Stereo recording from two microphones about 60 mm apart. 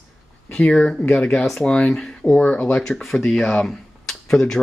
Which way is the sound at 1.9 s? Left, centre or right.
Centre.